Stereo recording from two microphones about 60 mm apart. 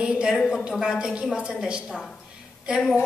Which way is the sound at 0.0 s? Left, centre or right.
Centre.